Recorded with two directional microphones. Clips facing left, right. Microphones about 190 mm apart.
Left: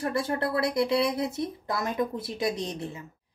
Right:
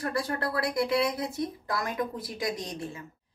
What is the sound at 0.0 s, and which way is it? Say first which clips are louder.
Speech: left 3 dB; 25° left (ahead or behind).